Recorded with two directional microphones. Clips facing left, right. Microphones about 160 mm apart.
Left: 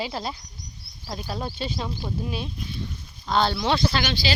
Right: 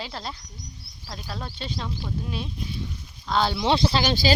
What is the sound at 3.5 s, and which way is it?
Speech, 25° right (ahead or behind).